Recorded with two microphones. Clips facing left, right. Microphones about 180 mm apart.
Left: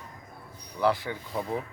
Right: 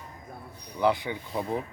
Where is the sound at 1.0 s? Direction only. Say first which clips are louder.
Right 1 dB; 15° right (ahead or behind).